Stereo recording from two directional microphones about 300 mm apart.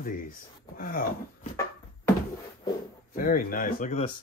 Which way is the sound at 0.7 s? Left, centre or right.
Left.